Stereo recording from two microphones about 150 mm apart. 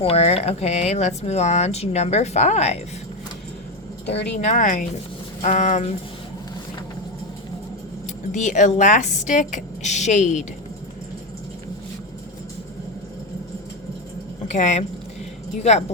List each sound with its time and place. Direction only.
0.0 s speech: 45° left (ahead or behind)
4.4 s speech: 55° left (ahead or behind)
8.0 s speech: 55° left (ahead or behind)
14.5 s speech: 55° left (ahead or behind)